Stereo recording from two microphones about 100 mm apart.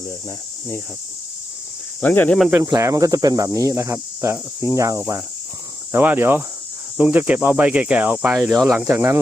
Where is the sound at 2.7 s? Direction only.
35° right (ahead or behind).